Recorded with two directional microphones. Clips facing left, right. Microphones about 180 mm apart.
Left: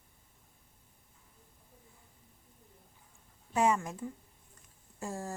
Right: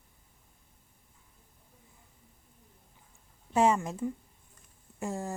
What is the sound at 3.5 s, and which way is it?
Speech, 25° right (ahead or behind).